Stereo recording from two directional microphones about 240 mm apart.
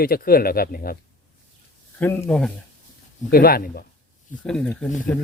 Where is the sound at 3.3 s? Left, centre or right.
Left.